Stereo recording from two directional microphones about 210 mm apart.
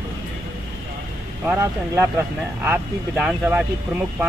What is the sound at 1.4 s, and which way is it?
Speech, 10° right (ahead or behind).